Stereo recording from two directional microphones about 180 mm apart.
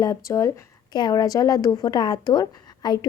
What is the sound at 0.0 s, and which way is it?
A woman's voice, 20° left (ahead or behind).